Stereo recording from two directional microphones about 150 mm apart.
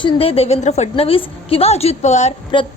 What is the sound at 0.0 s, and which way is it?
A woman's voice, 40° left (ahead or behind).